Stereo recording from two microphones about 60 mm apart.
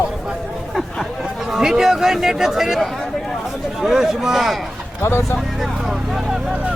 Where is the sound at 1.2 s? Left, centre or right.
Centre.